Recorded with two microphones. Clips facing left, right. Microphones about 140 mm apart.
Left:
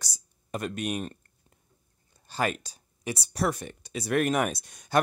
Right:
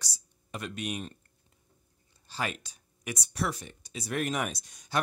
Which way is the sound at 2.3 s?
45° left (ahead or behind).